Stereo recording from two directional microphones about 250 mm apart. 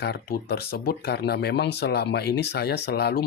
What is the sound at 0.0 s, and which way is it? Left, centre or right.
Speech, left.